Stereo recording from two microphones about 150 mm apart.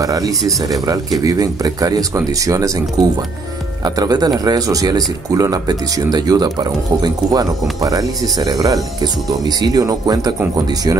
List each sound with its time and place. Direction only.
0.0 s speech: 25° right (ahead or behind)